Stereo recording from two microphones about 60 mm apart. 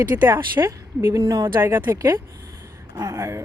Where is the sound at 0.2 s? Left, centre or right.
Right.